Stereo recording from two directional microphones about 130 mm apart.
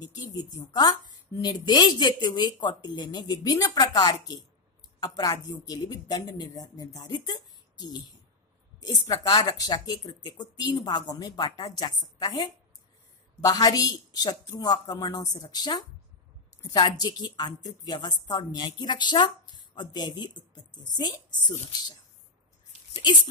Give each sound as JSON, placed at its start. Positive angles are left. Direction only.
{"t": 0.1, "sound": "a woman's voice", "side_deg": 30}